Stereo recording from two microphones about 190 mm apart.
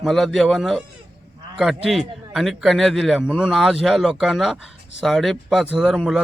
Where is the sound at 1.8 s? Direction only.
Centre (ahead or behind).